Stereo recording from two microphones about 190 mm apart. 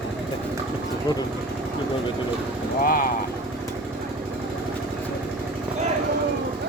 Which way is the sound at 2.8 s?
45° left (ahead or behind).